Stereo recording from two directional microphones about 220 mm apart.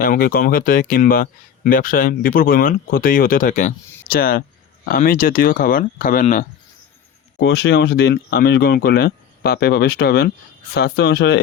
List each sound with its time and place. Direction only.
0.0 s speech: 40° left (ahead or behind)
7.3 s speech: 50° left (ahead or behind)